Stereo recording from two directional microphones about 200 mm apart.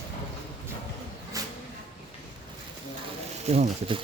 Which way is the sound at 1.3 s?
15° right (ahead or behind).